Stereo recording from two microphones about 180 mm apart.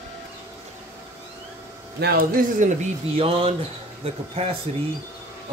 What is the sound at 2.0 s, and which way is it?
Speech, 60° right (ahead or behind).